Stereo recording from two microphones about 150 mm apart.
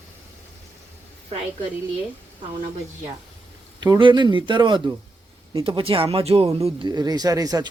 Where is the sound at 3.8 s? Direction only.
30° right (ahead or behind).